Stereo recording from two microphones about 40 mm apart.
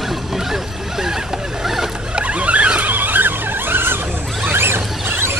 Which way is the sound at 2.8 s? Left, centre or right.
Right.